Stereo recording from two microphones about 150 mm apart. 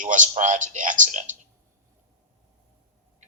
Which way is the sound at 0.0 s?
60° right (ahead or behind).